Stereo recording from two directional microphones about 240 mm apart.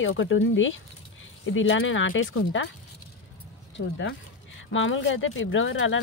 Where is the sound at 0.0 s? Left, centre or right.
Left.